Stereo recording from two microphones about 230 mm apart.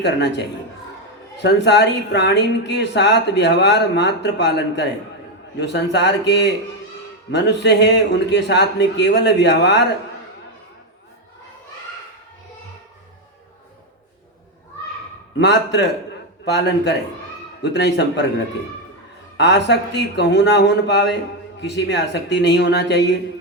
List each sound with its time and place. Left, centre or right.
0.0 s speech: left
7.3 s speech: left
15.4 s speech: left
19.4 s speech: left